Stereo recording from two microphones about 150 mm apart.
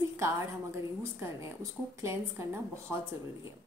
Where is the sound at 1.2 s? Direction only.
20° right (ahead or behind).